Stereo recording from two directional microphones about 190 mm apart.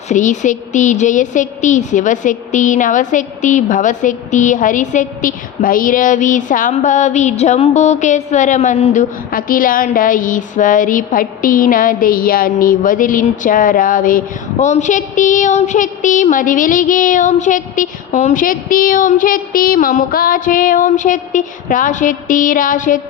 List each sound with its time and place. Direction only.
0.1 s a woman's voice: 40° left (ahead or behind)